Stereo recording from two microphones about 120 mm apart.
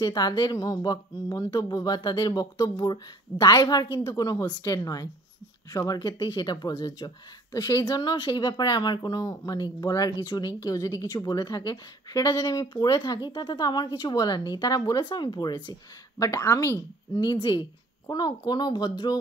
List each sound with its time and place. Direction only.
0.0 s a woman's voice: 35° left (ahead or behind)
16.2 s speech: 25° left (ahead or behind)
17.1 s a woman's voice: 40° left (ahead or behind)